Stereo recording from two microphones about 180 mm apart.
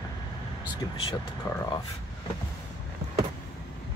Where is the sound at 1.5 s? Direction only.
15° left (ahead or behind).